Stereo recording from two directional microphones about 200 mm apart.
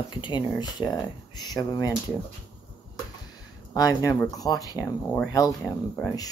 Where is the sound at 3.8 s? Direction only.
15° left (ahead or behind).